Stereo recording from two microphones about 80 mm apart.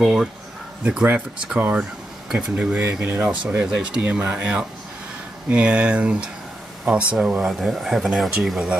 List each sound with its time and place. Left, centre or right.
0.0 s speech: centre
1.6 s speech: right
7.4 s speech: centre